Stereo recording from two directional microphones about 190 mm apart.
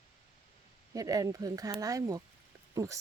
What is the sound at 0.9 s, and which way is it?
Speech, 20° right (ahead or behind).